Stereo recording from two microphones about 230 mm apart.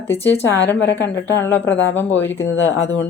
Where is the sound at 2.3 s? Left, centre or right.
Left.